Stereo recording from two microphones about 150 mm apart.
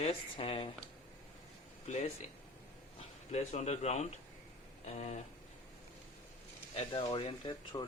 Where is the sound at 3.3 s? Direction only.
50° left (ahead or behind).